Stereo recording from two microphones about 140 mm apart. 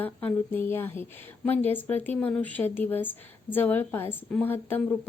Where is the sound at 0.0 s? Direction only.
15° left (ahead or behind).